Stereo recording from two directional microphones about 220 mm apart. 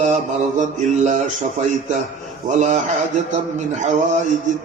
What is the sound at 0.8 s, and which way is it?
Mantra, 35° right (ahead or behind).